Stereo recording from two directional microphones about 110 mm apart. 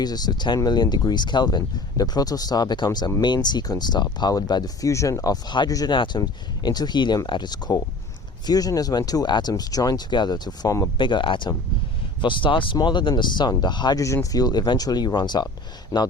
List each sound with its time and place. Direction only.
0.0 s speech: 40° left (ahead or behind)
10.9 s speech: 45° left (ahead or behind)
14.0 s speech: 30° left (ahead or behind)